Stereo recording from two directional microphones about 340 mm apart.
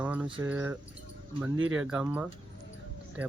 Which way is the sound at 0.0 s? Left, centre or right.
Centre.